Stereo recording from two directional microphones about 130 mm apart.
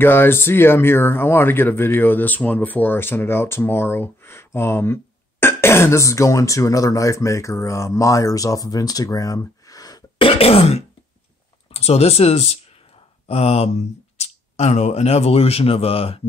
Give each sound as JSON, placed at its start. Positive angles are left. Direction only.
{"t": 0.0, "sound": "speech", "side_deg": 15}
{"t": 10.1, "sound": "throat clearing", "side_deg": 45}
{"t": 11.7, "sound": "speech", "side_deg": 50}